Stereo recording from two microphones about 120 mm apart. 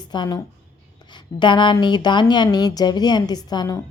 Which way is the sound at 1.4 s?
40° left (ahead or behind).